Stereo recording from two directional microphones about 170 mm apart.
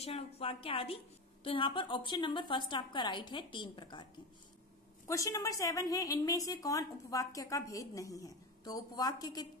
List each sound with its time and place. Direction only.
0.0 s a woman's voice: 35° left (ahead or behind)
5.0 s a woman's voice: 20° left (ahead or behind)